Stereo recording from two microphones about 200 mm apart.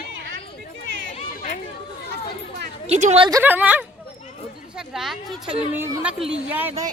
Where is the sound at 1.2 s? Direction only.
40° left (ahead or behind).